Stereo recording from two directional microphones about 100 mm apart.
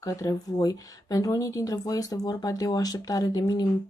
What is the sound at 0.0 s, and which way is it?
Speech, 35° left (ahead or behind).